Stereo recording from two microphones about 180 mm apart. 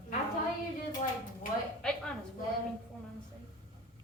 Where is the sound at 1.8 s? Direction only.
5° left (ahead or behind).